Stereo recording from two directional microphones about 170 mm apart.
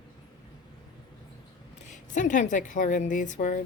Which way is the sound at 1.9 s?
45° left (ahead or behind).